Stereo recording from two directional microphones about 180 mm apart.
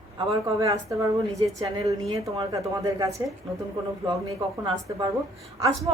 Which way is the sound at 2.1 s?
20° right (ahead or behind).